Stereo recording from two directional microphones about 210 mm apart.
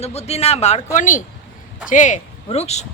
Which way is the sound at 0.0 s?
30° left (ahead or behind).